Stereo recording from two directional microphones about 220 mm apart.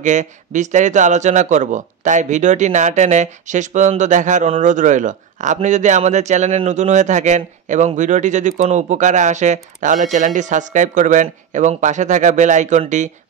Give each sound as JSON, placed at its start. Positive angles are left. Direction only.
{"t": 0.0, "sound": "speech", "side_deg": -35}